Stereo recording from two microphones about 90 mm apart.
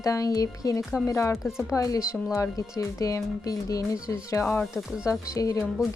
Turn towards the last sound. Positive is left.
turn(degrees=40)  # may be behind; listen again after turning